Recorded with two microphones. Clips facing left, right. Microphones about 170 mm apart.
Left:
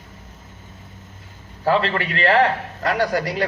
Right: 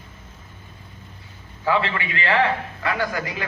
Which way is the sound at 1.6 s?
40° left (ahead or behind).